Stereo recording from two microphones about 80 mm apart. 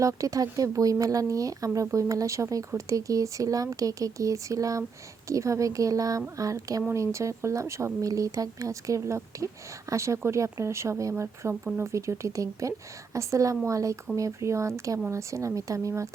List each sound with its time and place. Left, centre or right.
0.0 s speech: right